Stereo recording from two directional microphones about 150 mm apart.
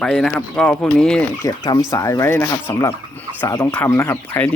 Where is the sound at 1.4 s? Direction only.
20° left (ahead or behind).